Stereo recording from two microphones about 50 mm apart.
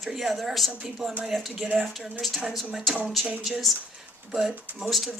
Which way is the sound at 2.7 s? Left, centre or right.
Centre.